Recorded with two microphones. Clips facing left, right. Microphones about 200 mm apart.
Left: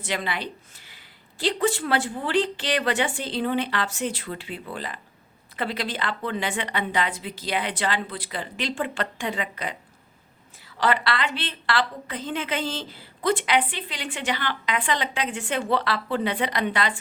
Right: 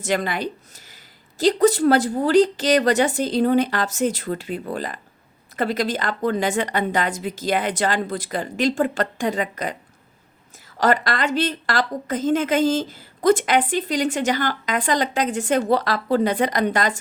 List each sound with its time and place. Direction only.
0.0 s a woman's voice: 45° right (ahead or behind)
10.8 s a woman's voice: 45° right (ahead or behind)